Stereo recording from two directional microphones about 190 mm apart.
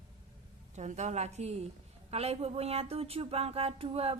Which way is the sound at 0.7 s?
40° right (ahead or behind).